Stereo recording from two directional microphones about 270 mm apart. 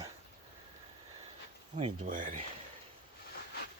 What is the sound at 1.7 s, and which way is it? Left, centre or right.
Speech, right.